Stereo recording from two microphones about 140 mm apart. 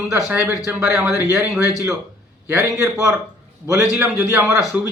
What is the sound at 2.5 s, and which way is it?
A man's voice, 20° right (ahead or behind).